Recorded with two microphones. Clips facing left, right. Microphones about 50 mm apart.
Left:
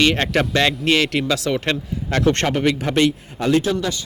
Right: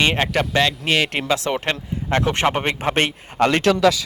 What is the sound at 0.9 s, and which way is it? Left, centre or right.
Speech, centre.